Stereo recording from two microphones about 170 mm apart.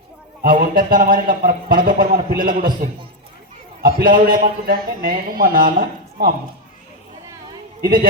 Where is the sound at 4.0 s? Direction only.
55° right (ahead or behind).